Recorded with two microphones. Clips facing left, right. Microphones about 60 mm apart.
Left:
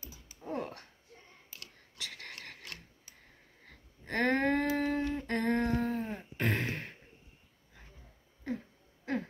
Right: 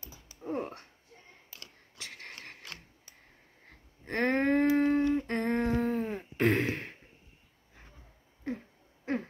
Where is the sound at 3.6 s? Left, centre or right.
Right.